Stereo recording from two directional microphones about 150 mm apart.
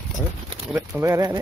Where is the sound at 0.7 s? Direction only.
5° right (ahead or behind).